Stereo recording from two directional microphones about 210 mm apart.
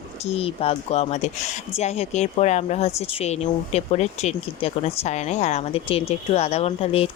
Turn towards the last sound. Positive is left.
turn(degrees=30)  # may be behind; listen again after turning